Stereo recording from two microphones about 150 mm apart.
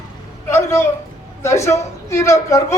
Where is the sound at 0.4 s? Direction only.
15° left (ahead or behind).